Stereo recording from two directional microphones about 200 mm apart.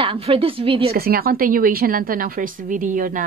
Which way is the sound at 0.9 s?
50° right (ahead or behind).